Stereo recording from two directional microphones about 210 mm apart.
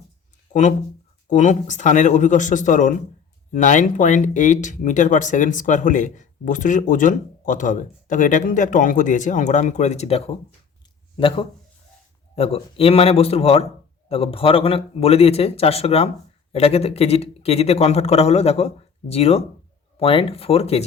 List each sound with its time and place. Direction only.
0.5 s speech: 40° left (ahead or behind)